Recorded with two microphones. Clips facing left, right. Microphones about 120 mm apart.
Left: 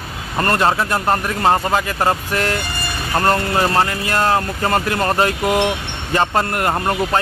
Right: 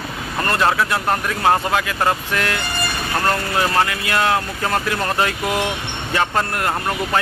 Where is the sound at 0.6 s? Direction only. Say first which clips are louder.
Right 1 dB; 25° left (ahead or behind).